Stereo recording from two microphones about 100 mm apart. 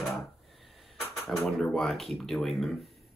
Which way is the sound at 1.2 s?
Centre (ahead or behind).